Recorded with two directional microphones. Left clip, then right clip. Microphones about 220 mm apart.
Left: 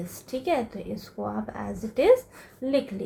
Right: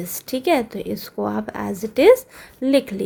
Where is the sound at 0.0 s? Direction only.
50° right (ahead or behind).